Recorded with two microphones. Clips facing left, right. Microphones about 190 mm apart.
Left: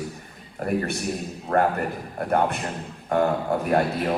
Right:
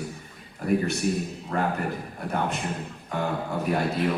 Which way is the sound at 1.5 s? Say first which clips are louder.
Left 5 dB; 60° left (ahead or behind).